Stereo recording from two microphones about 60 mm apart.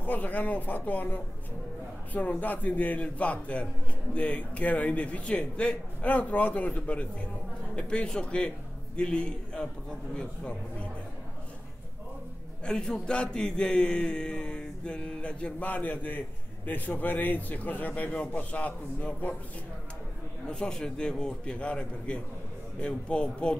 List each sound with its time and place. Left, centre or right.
0.0 s a man's voice: left
12.6 s a man's voice: centre
15.7 s a man's voice: left
20.4 s a man's voice: centre